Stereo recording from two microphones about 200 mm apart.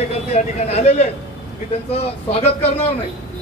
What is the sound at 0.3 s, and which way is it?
Speech, 30° left (ahead or behind).